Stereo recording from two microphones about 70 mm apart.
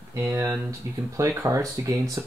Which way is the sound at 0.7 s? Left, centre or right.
Right.